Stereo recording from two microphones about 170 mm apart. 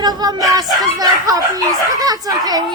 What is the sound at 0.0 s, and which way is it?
Speech, 25° right (ahead or behind).